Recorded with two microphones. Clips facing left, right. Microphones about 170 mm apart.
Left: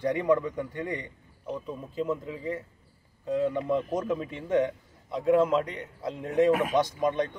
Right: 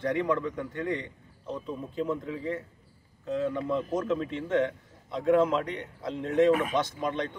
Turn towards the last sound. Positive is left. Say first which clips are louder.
# left 4 dB
turn(degrees=15)  # may be behind; listen again after turning